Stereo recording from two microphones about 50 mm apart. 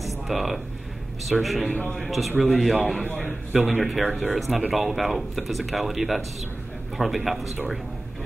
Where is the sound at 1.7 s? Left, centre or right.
Left.